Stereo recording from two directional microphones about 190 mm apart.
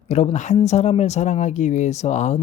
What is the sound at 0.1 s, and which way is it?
Speech, 35° left (ahead or behind).